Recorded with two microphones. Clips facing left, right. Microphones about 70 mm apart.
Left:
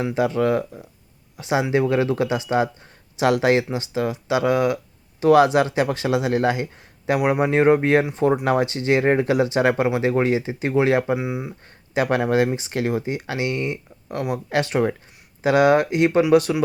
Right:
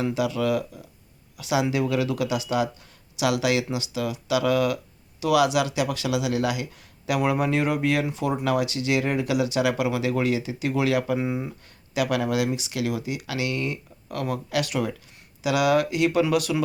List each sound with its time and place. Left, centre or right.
0.0 s speech: left
5.2 s speech: left
11.2 s speech: centre
11.9 s speech: left